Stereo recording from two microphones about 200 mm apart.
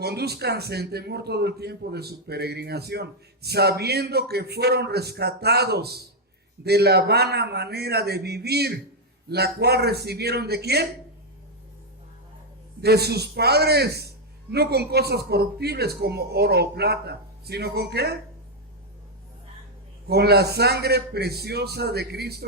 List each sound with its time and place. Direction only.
0.0 s a man's voice: 55° right (ahead or behind)
12.8 s a man's voice: 55° right (ahead or behind)
20.1 s a man's voice: 55° right (ahead or behind)